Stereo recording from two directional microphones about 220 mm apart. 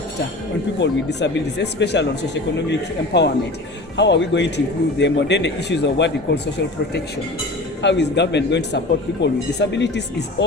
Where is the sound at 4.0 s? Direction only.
55° left (ahead or behind).